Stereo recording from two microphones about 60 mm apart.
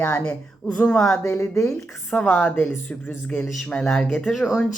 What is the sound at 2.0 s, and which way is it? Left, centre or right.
Speech, left.